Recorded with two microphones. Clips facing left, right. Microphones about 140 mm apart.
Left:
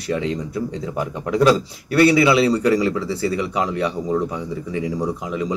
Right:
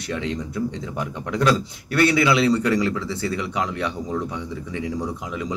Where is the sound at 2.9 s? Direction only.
35° left (ahead or behind).